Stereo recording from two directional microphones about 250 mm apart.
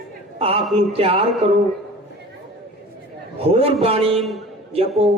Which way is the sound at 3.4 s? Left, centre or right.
Right.